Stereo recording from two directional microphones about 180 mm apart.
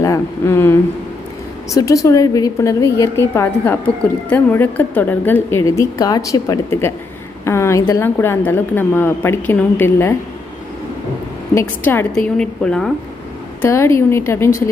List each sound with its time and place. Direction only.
0.0 s a woman's voice: 15° left (ahead or behind)
11.5 s a woman's voice: 10° left (ahead or behind)
13.6 s a woman's voice: 15° left (ahead or behind)